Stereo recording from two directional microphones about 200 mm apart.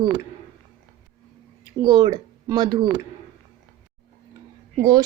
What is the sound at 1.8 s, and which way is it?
A woman's voice, 25° right (ahead or behind).